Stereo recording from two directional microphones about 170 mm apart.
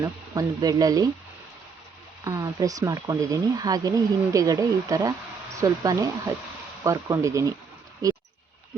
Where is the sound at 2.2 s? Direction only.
20° right (ahead or behind).